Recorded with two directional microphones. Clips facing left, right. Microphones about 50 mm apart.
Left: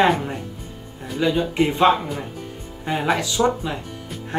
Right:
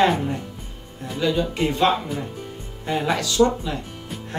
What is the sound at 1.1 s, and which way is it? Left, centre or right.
Speech, centre.